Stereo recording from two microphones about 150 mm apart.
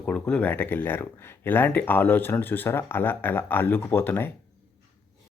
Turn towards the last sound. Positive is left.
turn(degrees=15)  # may be behind; listen again after turning